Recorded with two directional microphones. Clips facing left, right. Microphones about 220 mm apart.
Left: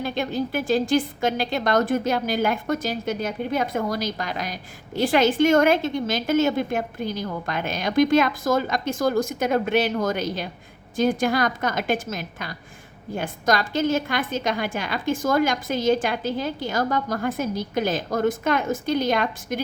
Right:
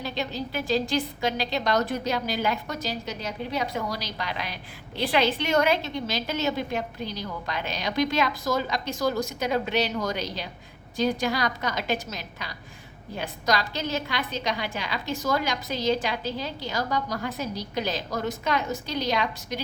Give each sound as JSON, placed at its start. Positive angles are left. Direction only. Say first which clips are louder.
{"t": 0.0, "sound": "a woman's voice", "louder": "left 6 dB", "side_deg": 50}